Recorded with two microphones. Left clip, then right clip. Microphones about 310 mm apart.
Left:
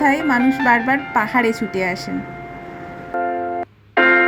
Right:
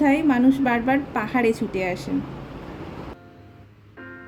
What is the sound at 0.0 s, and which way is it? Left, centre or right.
Speech, centre.